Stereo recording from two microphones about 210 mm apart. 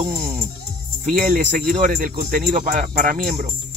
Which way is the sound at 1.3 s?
40° right (ahead or behind).